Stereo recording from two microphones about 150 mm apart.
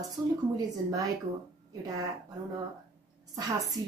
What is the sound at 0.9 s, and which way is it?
Speech, 25° right (ahead or behind).